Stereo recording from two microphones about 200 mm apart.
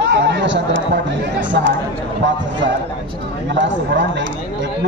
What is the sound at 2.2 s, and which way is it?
A man's voice, 65° right (ahead or behind).